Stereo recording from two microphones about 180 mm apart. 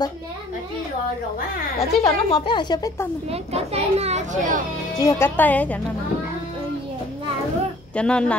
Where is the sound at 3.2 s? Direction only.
35° right (ahead or behind).